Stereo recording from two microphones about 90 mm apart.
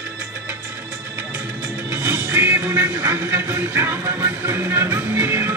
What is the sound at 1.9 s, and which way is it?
Music, 25° right (ahead or behind).